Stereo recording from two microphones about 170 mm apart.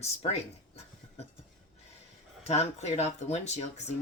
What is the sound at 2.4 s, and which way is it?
Speech, 40° left (ahead or behind).